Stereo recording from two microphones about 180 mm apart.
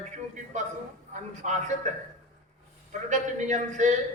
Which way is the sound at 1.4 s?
40° right (ahead or behind).